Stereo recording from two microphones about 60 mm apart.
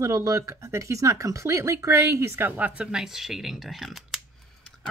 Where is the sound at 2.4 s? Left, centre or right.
Right.